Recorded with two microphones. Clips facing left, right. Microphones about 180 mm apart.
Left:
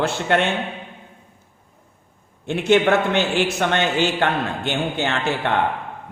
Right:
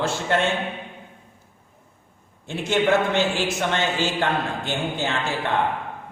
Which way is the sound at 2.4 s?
65° left (ahead or behind).